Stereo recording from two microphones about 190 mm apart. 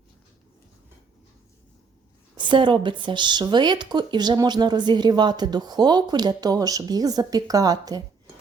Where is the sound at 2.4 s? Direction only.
25° right (ahead or behind).